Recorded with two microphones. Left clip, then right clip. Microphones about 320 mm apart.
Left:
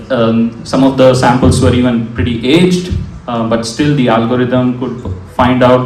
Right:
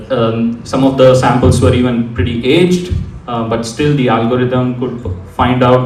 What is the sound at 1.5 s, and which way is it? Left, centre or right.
A man's voice, left.